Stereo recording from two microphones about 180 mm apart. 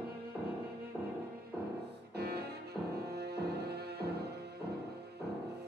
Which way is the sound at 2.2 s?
65° right (ahead or behind).